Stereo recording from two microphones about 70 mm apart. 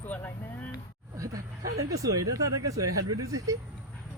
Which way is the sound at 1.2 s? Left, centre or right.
Right.